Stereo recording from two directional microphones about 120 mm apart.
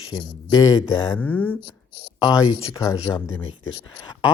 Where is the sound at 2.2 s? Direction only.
40° left (ahead or behind).